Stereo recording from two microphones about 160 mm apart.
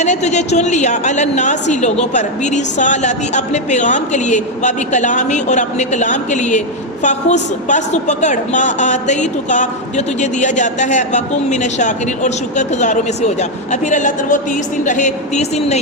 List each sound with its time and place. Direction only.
0.0 s a woman's voice: 45° left (ahead or behind)